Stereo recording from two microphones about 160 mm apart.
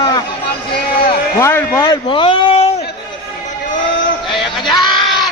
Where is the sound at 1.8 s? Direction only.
30° left (ahead or behind).